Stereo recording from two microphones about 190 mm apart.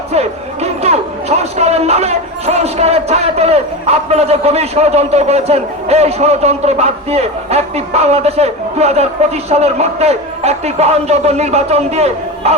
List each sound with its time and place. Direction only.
0.1 s speech: 35° right (ahead or behind)